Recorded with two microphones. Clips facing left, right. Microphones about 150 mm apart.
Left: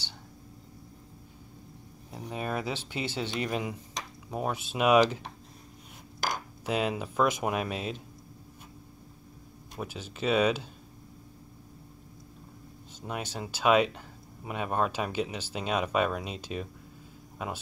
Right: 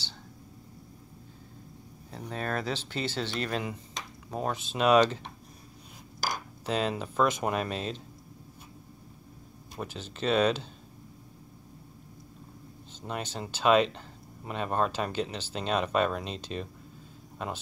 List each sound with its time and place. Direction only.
2.0 s speech: 10° left (ahead or behind)
6.6 s speech: 10° left (ahead or behind)
9.8 s speech: 10° left (ahead or behind)
13.0 s speech: 5° left (ahead or behind)